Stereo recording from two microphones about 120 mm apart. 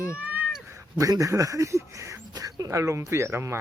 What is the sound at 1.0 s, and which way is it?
Speech, 25° right (ahead or behind).